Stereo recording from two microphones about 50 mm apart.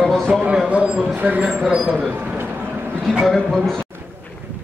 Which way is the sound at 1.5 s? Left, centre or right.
Centre.